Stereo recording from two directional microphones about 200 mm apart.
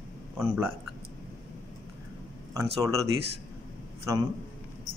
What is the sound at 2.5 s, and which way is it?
Speech, 15° right (ahead or behind).